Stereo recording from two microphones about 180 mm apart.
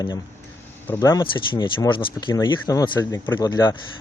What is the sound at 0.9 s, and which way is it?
Speech, 15° left (ahead or behind).